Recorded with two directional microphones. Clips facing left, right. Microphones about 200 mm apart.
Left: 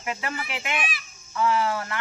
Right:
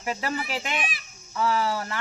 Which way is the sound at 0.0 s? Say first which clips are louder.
Right 2 dB; 35° right (ahead or behind).